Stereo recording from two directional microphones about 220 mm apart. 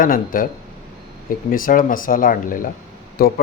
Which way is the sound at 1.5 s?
40° left (ahead or behind).